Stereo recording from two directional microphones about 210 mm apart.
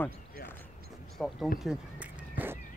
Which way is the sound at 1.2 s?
Centre (ahead or behind).